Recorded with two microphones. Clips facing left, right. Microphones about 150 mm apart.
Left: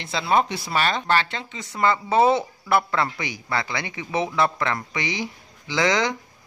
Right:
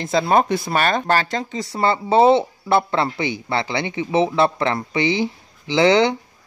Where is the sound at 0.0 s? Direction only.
45° right (ahead or behind).